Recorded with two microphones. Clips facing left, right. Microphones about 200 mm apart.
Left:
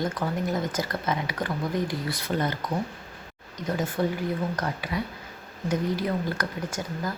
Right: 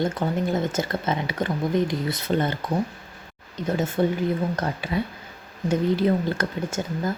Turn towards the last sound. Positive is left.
turn(degrees=-25)  # may be behind; listen again after turning